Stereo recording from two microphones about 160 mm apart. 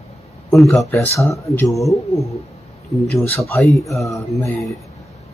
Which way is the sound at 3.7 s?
Centre (ahead or behind).